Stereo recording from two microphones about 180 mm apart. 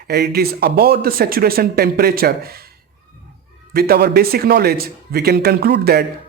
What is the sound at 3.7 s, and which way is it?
Speech, 60° right (ahead or behind).